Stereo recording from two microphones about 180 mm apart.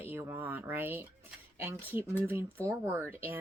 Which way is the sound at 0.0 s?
15° right (ahead or behind).